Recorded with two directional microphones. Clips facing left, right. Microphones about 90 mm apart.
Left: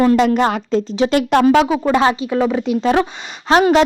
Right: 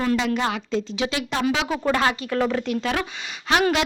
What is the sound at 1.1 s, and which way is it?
Speech, 50° left (ahead or behind).